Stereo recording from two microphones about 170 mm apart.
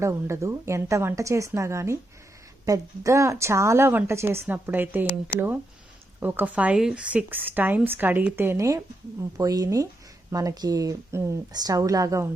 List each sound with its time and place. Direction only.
0.0 s speech: 15° right (ahead or behind)
6.1 s speech: 10° right (ahead or behind)